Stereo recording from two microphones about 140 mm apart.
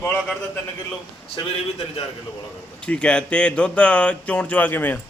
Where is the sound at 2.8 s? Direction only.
5° left (ahead or behind).